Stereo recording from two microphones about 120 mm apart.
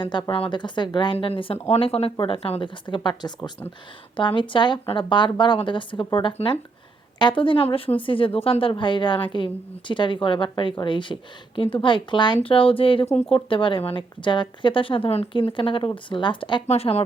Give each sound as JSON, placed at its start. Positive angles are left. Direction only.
{"t": 0.0, "sound": "a woman's voice", "side_deg": 40}
{"t": 1.6, "sound": "a woman's voice", "side_deg": 60}
{"t": 2.8, "sound": "a woman's voice", "side_deg": 40}
{"t": 16.6, "sound": "speech", "side_deg": 60}